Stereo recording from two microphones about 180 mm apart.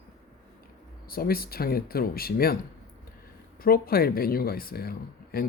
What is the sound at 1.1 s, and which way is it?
Speech, 55° left (ahead or behind).